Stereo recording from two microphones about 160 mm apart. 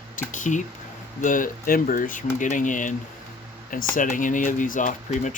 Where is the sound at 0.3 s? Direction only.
50° left (ahead or behind).